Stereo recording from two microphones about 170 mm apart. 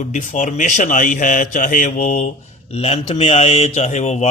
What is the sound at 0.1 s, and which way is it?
Speech, 45° left (ahead or behind).